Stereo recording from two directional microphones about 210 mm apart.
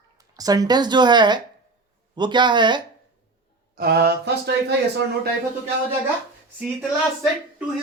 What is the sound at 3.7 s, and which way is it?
Speech, 50° right (ahead or behind).